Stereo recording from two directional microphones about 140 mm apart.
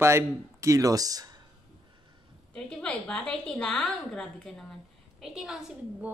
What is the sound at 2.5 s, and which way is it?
A woman's voice, 5° left (ahead or behind).